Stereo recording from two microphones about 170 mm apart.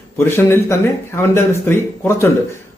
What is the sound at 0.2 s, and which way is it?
Speech, 15° left (ahead or behind).